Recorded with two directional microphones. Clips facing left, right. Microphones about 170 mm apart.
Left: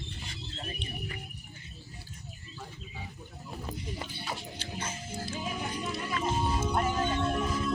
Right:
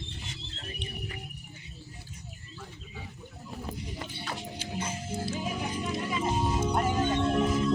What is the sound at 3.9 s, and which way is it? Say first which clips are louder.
Music: even; 5° left (ahead or behind).